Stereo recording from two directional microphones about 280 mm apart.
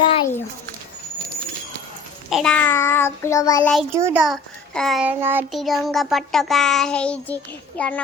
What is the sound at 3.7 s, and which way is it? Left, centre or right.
A child's voice, centre.